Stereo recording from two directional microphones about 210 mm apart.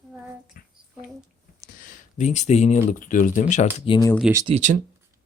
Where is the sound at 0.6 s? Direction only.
40° left (ahead or behind).